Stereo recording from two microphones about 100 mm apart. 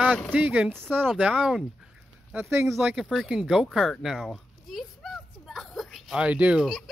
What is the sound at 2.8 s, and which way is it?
Speech, 10° right (ahead or behind).